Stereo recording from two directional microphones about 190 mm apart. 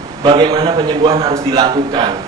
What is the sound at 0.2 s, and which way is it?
A man's voice, 25° right (ahead or behind).